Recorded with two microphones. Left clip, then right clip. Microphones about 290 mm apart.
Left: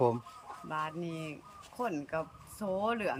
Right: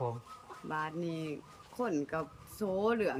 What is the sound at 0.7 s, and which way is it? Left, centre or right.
Speech, centre.